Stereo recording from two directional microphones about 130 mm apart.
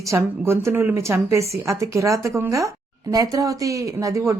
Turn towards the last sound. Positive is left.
turn(degrees=-25)  # may be behind; listen again after turning